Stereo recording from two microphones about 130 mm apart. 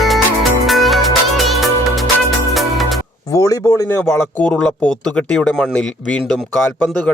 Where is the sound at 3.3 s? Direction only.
25° left (ahead or behind).